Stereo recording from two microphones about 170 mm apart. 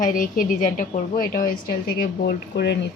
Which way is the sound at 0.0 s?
55° left (ahead or behind).